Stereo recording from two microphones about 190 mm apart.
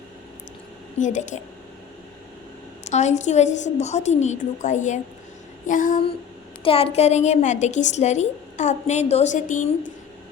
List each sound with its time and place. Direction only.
0.9 s a woman's voice: 40° left (ahead or behind)
2.8 s a woman's voice: 35° left (ahead or behind)
5.6 s a sound: 45° left (ahead or behind)
6.7 s a woman's voice: 30° left (ahead or behind)